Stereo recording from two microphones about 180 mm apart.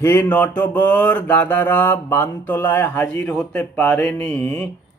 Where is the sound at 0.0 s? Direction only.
15° left (ahead or behind).